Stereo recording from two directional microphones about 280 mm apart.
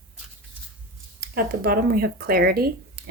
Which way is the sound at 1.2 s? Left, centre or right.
Right.